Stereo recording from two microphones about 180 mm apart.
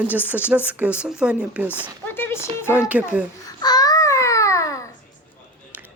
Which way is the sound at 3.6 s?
20° left (ahead or behind).